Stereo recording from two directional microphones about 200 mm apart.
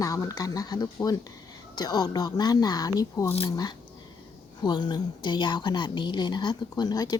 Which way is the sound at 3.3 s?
30° left (ahead or behind).